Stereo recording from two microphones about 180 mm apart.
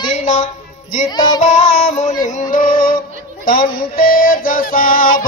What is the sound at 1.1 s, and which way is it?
Speech, 25° left (ahead or behind).